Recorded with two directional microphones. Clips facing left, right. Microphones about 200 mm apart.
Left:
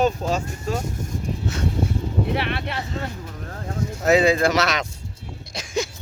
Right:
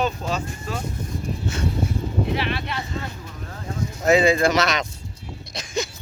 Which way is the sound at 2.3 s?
60° left (ahead or behind).